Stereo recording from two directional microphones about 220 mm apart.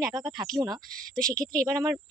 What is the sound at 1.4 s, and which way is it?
Speech, 40° right (ahead or behind).